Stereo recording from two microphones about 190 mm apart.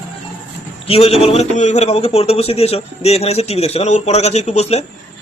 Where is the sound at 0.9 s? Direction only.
30° left (ahead or behind).